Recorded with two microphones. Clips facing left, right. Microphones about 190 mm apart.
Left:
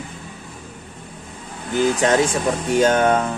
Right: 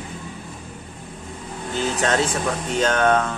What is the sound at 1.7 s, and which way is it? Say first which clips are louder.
Speech: left 5 dB; 15° left (ahead or behind).